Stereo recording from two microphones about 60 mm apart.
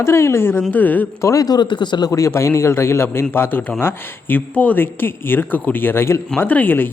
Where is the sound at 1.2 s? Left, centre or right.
Left.